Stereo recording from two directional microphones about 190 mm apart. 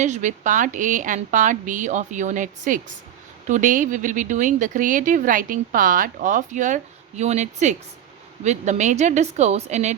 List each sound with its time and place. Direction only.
0.0 s a woman's voice: 40° right (ahead or behind)